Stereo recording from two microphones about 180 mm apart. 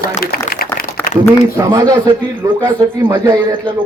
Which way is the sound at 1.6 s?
20° right (ahead or behind).